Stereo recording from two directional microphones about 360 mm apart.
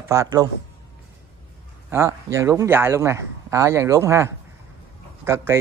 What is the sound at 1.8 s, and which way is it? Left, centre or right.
A man's voice, centre.